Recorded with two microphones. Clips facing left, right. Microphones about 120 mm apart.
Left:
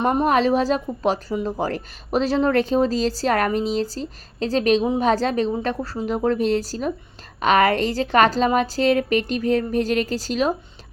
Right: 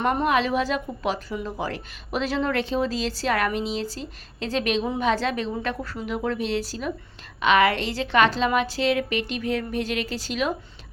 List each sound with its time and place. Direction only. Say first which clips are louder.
0.0 s a woman's voice: left 3 dB; 20° left (ahead or behind)
0.3 s a woman's voice: left 4 dB; 40° left (ahead or behind)